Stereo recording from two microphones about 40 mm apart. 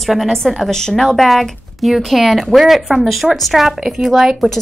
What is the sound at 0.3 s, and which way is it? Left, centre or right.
Speech, centre.